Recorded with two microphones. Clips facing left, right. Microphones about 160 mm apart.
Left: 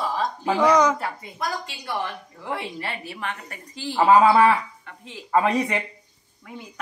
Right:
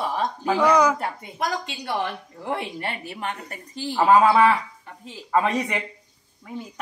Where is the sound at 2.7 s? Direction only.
50° right (ahead or behind).